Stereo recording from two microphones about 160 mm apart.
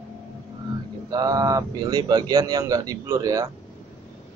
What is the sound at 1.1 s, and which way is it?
Speech, 25° right (ahead or behind).